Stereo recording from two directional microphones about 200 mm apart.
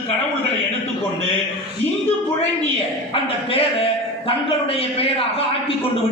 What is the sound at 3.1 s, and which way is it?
A man's voice, 30° left (ahead or behind).